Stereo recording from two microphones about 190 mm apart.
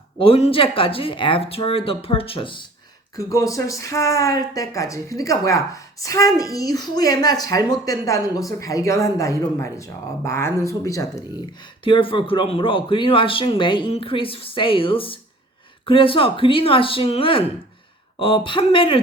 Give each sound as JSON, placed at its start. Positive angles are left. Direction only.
{"t": 0.2, "sound": "speech", "side_deg": 30}
{"t": 11.8, "sound": "speech", "side_deg": 25}